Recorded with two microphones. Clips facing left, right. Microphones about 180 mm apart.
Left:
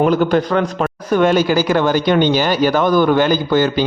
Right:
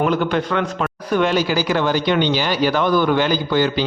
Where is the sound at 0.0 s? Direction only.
40° left (ahead or behind).